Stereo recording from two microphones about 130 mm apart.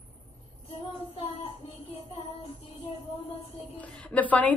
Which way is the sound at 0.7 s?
45° left (ahead or behind).